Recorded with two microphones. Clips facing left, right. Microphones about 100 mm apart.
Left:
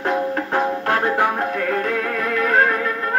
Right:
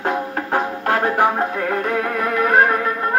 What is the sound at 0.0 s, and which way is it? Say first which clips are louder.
Music: left 1 dB; 25° right (ahead or behind).